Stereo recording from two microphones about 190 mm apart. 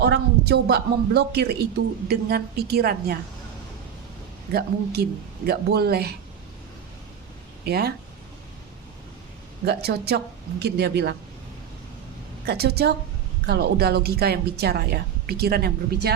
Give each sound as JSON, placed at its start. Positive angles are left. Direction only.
{"t": 0.0, "sound": "speech", "side_deg": -60}
{"t": 4.5, "sound": "speech", "side_deg": -55}
{"t": 7.6, "sound": "speech", "side_deg": -55}
{"t": 9.6, "sound": "speech", "side_deg": -55}
{"t": 12.5, "sound": "speech", "side_deg": -55}